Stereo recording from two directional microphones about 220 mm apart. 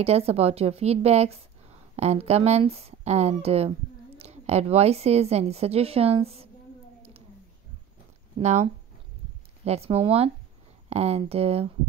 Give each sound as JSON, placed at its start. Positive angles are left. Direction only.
{"t": 0.0, "sound": "a woman's voice", "side_deg": -30}
{"t": 8.4, "sound": "speech", "side_deg": -30}
{"t": 9.7, "sound": "a woman's voice", "side_deg": -25}